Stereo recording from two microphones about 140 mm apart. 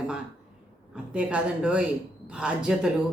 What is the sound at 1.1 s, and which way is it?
A woman's voice, 10° right (ahead or behind).